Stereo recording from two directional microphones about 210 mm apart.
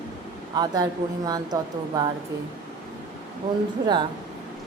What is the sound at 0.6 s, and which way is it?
Speech, 20° right (ahead or behind).